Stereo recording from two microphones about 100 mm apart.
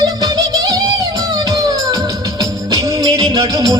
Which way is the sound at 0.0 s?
40° right (ahead or behind).